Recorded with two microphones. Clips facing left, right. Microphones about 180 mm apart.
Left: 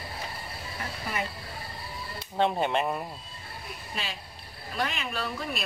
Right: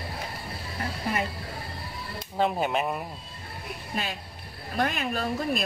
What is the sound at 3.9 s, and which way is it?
Speech, 50° right (ahead or behind).